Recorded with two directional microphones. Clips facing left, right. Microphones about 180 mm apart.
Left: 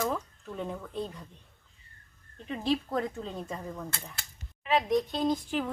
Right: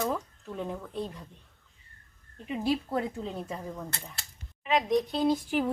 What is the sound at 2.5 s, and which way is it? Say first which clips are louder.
Speech: right 1 dB; 10° right (ahead or behind).